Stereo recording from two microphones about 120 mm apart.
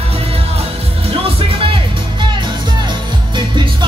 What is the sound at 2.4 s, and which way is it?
Music, 40° right (ahead or behind).